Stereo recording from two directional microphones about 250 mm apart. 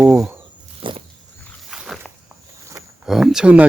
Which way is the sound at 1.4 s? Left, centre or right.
Centre.